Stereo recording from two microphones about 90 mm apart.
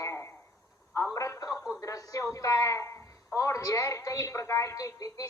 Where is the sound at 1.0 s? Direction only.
35° left (ahead or behind).